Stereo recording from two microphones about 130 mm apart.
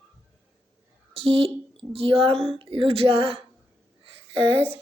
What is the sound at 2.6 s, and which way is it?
Speech, 45° right (ahead or behind).